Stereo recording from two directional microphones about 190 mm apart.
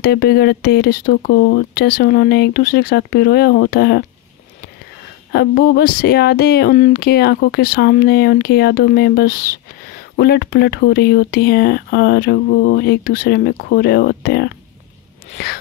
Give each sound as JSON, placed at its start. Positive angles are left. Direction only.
{"t": 0.0, "sound": "speech", "side_deg": 55}
{"t": 5.3, "sound": "speech", "side_deg": 55}